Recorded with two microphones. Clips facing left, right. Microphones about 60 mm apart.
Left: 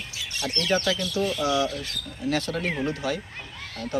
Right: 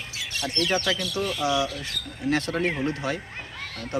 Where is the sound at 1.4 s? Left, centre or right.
Right.